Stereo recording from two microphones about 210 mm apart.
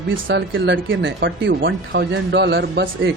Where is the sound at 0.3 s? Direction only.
60° right (ahead or behind).